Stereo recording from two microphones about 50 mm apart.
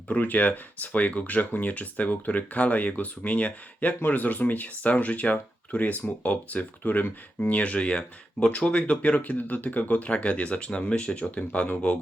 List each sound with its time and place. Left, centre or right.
0.1 s speech: left
7.5 s speech: left